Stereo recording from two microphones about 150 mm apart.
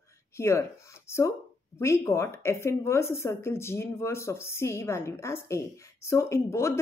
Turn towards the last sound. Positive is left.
turn(degrees=20)  # may be behind; listen again after turning